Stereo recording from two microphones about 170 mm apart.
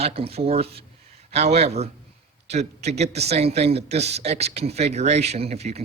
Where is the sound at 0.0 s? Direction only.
35° right (ahead or behind).